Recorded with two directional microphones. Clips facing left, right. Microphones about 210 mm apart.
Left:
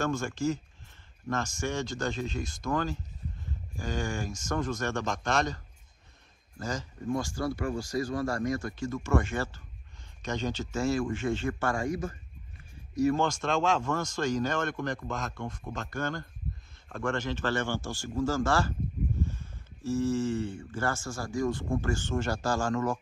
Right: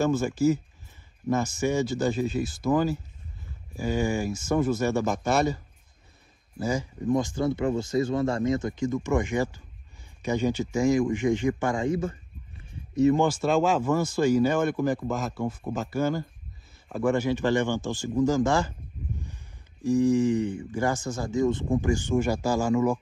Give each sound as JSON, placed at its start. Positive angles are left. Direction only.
{"t": 0.0, "sound": "speech", "side_deg": -5}
{"t": 6.6, "sound": "speech", "side_deg": -10}
{"t": 13.2, "sound": "speech", "side_deg": -5}